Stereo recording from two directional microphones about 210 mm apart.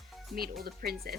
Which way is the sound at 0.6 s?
45° right (ahead or behind).